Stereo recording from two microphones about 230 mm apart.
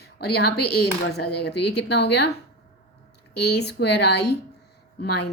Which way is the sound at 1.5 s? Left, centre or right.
Left.